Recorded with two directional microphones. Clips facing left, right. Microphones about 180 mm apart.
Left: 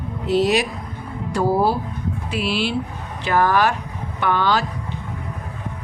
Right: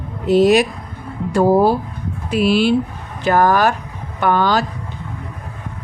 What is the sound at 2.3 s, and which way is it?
A woman's voice, 45° right (ahead or behind).